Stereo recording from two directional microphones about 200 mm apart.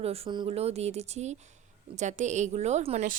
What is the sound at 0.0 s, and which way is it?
Speech, 30° right (ahead or behind).